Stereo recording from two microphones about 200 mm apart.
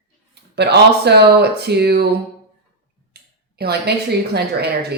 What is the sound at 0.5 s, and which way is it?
Speech, 55° right (ahead or behind).